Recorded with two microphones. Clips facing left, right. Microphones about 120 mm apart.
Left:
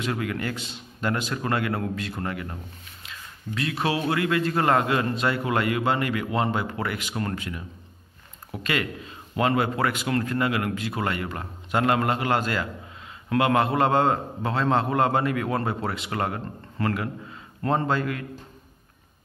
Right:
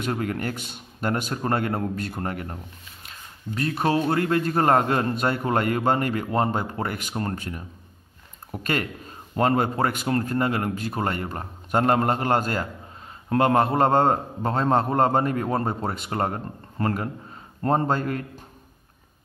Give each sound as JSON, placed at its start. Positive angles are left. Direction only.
{"t": 0.1, "sound": "a man's voice", "side_deg": -40}
{"t": 1.3, "sound": "a man's voice", "side_deg": -40}
{"t": 3.0, "sound": "a sound", "side_deg": -45}
{"t": 4.1, "sound": "a man's voice", "side_deg": -40}
{"t": 8.6, "sound": "a man's voice", "side_deg": -45}